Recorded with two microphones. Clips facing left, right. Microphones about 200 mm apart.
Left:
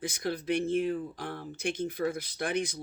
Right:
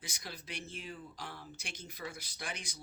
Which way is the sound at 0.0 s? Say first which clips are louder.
Left 15 dB; 55° left (ahead or behind).